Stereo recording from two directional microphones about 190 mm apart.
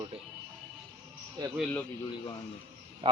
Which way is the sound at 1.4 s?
20° right (ahead or behind).